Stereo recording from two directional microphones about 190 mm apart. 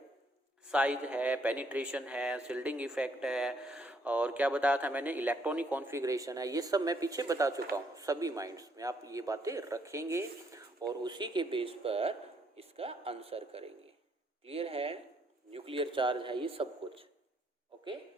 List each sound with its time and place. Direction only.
0.7 s a man's voice: 5° right (ahead or behind); by 17.1 s 30° right (ahead or behind)